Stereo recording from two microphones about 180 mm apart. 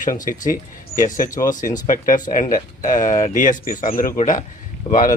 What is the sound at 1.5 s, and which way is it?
Speech, 45° left (ahead or behind).